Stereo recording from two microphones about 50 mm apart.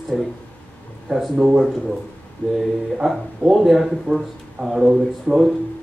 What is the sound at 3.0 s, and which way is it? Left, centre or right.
A man's voice, centre.